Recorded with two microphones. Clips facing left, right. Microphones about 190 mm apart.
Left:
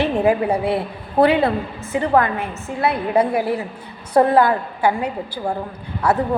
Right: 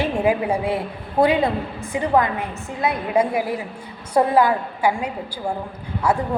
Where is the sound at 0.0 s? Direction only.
10° right (ahead or behind).